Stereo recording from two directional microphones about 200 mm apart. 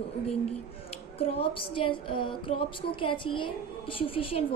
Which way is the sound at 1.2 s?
25° left (ahead or behind).